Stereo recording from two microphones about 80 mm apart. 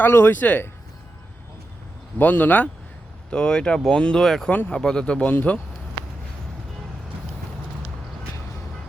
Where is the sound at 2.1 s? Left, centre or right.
Left.